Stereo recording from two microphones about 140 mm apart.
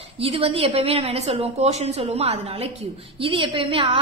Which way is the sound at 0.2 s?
40° right (ahead or behind).